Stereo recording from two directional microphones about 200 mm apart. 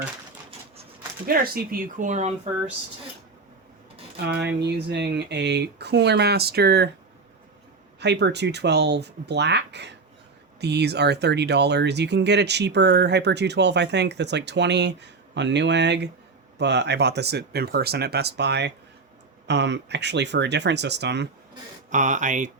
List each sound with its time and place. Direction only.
1.3 s speech: 45° right (ahead or behind)
4.3 s speech: 55° right (ahead or behind)
7.9 s speech: 60° right (ahead or behind)
21.8 s speech: 40° right (ahead or behind)